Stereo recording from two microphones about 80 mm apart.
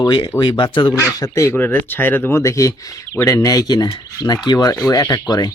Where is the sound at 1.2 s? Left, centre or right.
Left.